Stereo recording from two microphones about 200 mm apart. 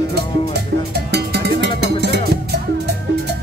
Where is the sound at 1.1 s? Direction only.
55° right (ahead or behind).